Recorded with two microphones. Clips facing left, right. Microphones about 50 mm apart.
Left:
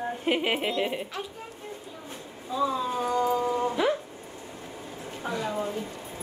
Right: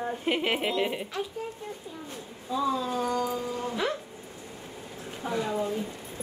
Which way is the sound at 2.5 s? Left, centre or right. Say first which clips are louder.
Left 1 dB; centre.